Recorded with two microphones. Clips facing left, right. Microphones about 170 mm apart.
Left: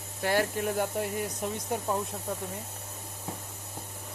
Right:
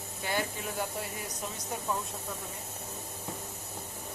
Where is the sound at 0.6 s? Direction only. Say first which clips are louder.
Left 7 dB; 50° left (ahead or behind).